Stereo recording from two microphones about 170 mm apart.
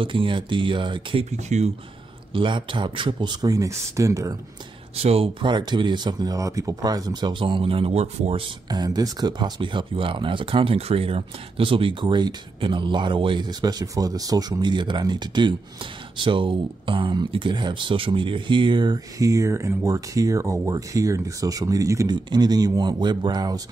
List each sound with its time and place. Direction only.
0.0 s speech: 30° right (ahead or behind)
1.3 s speech: 40° right (ahead or behind)
2.3 s speech: 30° right (ahead or behind)
4.9 s speech: 35° right (ahead or behind)
8.6 s speech: 25° right (ahead or behind)